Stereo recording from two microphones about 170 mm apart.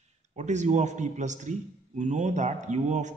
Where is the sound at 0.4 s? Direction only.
45° right (ahead or behind).